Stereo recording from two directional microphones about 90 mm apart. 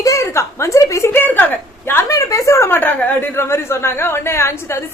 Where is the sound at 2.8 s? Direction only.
20° left (ahead or behind).